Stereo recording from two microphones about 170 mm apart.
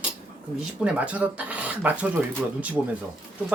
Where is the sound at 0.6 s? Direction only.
10° right (ahead or behind).